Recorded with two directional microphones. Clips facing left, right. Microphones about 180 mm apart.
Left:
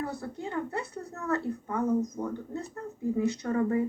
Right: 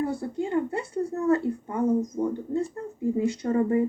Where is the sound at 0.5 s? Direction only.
25° right (ahead or behind).